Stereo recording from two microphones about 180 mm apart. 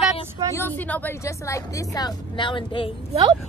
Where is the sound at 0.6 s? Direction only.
10° left (ahead or behind); by 2.9 s 30° left (ahead or behind).